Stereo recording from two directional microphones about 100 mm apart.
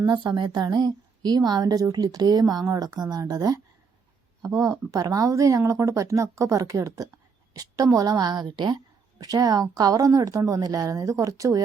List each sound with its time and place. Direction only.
0.1 s a woman's voice: 50° right (ahead or behind)